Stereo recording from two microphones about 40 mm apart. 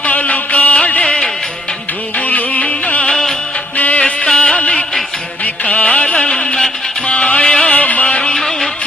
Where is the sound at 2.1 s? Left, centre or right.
Left.